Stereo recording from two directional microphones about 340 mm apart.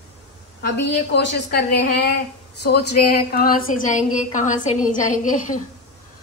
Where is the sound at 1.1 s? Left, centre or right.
Left.